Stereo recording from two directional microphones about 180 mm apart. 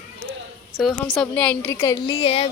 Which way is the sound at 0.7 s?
Centre (ahead or behind).